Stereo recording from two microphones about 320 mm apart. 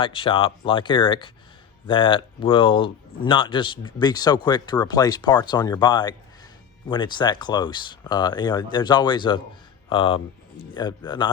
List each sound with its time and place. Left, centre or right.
0.0 s speech: centre